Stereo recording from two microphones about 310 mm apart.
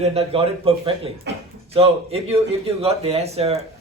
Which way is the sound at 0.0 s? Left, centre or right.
Centre.